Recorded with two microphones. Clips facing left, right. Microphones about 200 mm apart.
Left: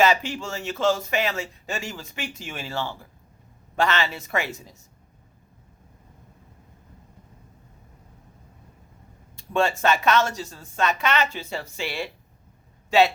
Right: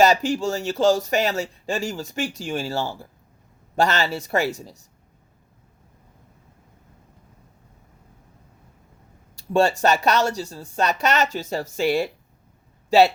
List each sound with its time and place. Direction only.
0.0 s speech: 40° right (ahead or behind)
9.5 s speech: 40° right (ahead or behind)